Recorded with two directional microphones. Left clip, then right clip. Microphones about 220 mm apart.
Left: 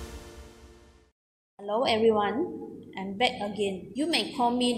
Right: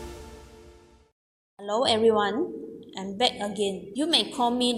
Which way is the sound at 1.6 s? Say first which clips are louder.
Right 2 dB; 20° right (ahead or behind).